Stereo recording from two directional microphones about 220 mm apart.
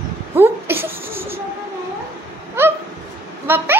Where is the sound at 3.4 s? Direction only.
10° right (ahead or behind).